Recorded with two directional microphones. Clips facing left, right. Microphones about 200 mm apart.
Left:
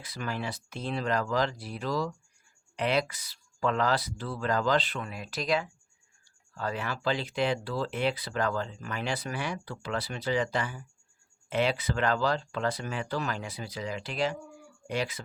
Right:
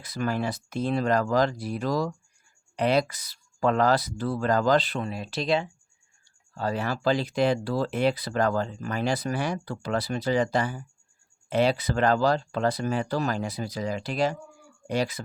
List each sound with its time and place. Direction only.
0.0 s speech: 45° right (ahead or behind)